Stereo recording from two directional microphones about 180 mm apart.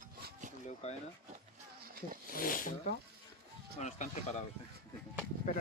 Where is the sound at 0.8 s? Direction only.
35° left (ahead or behind).